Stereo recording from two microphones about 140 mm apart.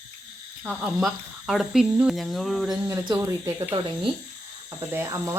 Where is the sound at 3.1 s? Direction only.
25° right (ahead or behind).